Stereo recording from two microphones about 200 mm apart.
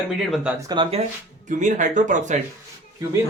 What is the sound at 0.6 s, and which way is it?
Speech, 20° right (ahead or behind).